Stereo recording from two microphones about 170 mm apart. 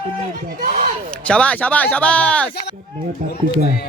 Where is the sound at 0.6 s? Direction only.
50° right (ahead or behind).